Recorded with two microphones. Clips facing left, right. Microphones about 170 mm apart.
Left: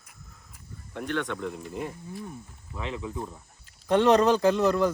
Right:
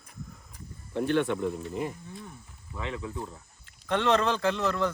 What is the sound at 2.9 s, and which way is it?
Speech, 25° left (ahead or behind).